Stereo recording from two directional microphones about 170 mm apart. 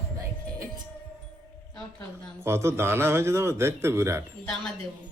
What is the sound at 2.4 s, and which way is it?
A man's voice, 15° right (ahead or behind).